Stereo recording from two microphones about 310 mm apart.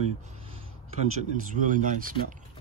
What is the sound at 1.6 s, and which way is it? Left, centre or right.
Speech, right.